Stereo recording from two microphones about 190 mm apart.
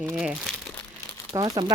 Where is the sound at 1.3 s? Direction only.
20° right (ahead or behind).